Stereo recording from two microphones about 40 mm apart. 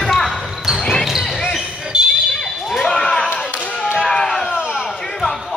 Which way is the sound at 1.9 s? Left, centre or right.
Right.